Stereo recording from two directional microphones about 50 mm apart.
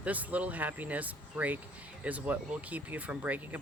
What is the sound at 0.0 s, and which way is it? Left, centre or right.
Speech, right.